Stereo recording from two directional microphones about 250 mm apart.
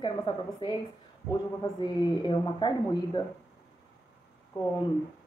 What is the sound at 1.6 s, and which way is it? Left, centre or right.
Speech, centre.